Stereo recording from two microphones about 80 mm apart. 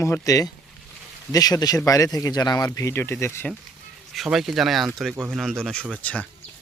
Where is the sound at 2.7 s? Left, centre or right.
Left.